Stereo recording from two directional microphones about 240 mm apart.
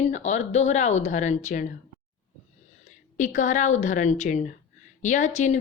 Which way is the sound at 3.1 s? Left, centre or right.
Left.